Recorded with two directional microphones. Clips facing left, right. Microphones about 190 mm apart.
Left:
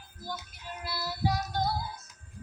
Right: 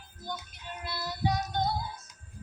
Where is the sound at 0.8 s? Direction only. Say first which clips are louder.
Even; 5° left (ahead or behind).